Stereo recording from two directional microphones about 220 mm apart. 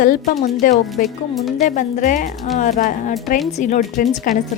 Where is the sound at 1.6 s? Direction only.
35° left (ahead or behind).